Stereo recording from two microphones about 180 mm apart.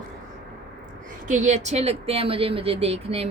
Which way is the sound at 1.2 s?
40° right (ahead or behind).